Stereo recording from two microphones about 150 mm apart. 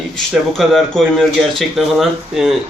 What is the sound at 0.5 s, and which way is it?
Speech, centre (ahead or behind).